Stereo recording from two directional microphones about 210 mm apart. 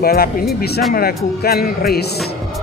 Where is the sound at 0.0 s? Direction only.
45° left (ahead or behind).